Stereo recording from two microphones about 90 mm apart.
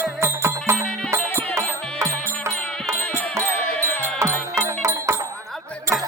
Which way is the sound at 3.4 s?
20° left (ahead or behind).